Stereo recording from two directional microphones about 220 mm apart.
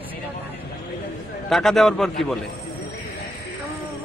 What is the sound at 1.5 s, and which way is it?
Speech, centre (ahead or behind).